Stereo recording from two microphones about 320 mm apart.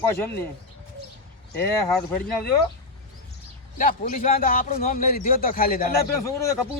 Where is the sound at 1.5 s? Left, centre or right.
Centre.